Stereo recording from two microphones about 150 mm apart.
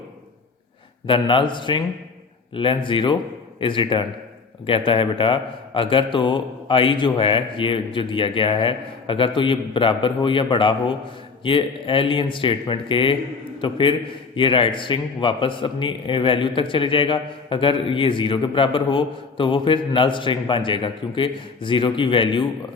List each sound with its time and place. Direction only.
1.0 s a man's voice: 35° left (ahead or behind)